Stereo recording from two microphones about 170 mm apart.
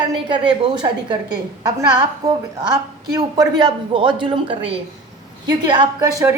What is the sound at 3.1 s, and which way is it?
A woman's voice, 25° right (ahead or behind).